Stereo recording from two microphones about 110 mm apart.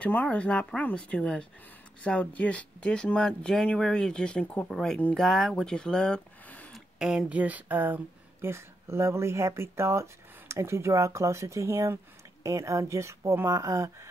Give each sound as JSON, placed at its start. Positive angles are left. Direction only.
{"t": 0.0, "sound": "speech", "side_deg": 15}
{"t": 7.0, "sound": "speech", "side_deg": -5}